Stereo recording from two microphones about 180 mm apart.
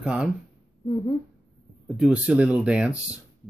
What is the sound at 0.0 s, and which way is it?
Speech, 5° right (ahead or behind).